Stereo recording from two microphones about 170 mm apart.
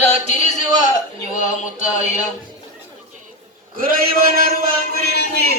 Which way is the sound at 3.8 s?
60° right (ahead or behind).